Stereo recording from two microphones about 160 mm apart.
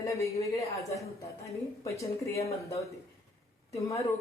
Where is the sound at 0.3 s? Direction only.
20° left (ahead or behind).